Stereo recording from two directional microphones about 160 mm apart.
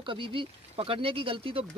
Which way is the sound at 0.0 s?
30° right (ahead or behind).